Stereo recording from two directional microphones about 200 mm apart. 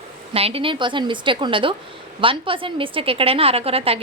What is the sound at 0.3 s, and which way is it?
A woman's voice, 30° right (ahead or behind).